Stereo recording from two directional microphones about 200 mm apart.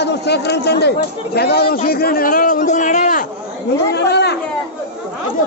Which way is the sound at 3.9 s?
55° left (ahead or behind).